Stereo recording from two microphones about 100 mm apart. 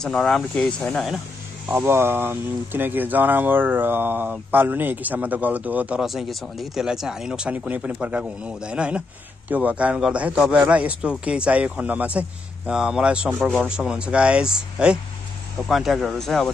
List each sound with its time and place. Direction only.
0.0 s speech: 5° left (ahead or behind)
1.8 s speech: 25° right (ahead or behind)
6.0 s speech: centre (ahead or behind)